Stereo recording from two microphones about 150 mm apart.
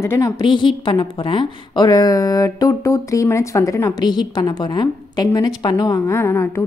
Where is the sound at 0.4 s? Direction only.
30° left (ahead or behind).